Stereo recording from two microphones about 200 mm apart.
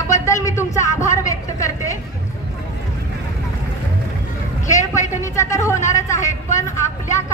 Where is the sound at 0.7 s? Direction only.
35° left (ahead or behind).